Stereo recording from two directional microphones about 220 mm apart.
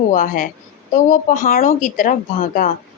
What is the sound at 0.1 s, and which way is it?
Speech, 35° left (ahead or behind).